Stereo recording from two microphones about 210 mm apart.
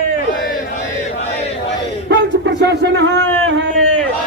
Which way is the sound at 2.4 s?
55° right (ahead or behind).